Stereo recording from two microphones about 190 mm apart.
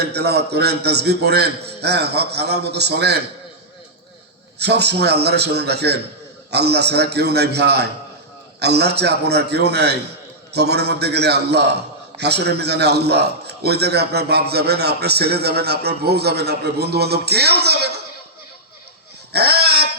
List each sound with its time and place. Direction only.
0.0 s a man's voice: 60° right (ahead or behind)
4.5 s a man's voice: 60° right (ahead or behind)
19.3 s a sound: 55° right (ahead or behind)